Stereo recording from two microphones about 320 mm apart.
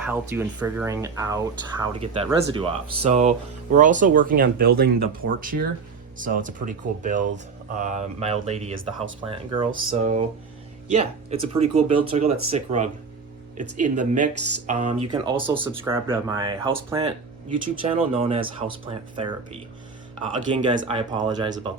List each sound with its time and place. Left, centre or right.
0.0 s speech: centre
20.5 s speech: centre